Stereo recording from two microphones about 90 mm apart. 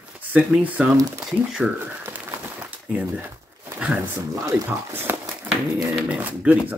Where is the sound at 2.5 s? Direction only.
20° right (ahead or behind).